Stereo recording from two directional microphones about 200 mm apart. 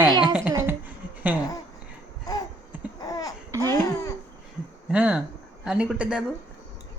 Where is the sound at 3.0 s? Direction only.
15° left (ahead or behind).